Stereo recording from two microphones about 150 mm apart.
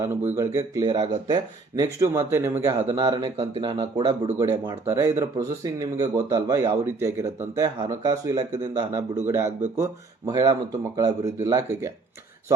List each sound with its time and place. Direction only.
0.0 s speech: 15° right (ahead or behind); by 4.1 s 35° right (ahead or behind)
4.4 s speech: 15° right (ahead or behind)